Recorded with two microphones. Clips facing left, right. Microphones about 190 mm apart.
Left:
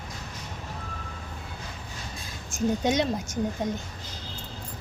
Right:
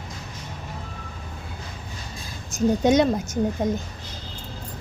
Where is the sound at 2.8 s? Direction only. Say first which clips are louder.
Right 8 dB; 45° right (ahead or behind).